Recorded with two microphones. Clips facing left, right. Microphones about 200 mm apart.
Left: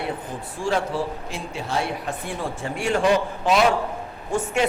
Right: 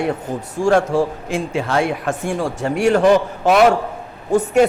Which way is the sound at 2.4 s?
75° right (ahead or behind).